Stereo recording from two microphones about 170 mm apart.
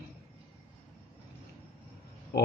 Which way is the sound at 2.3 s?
80° left.